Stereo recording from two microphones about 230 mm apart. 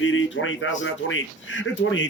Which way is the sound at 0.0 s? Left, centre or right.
Left.